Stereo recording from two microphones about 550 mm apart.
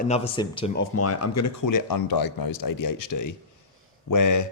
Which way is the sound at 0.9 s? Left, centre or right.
Left.